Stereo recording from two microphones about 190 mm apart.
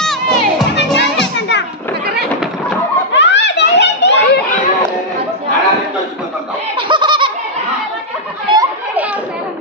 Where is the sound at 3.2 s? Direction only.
65° left (ahead or behind).